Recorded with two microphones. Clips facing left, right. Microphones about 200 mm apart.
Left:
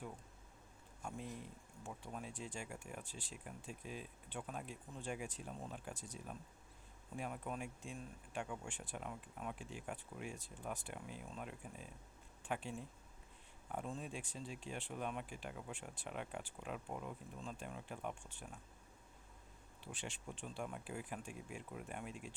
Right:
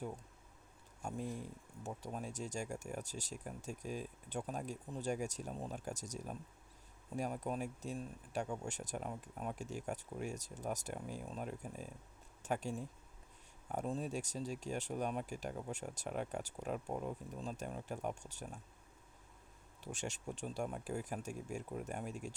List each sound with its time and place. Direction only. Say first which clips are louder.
1.0 s speech: right 5 dB; 45° right (ahead or behind)
19.8 s speech: right 6 dB; 45° right (ahead or behind)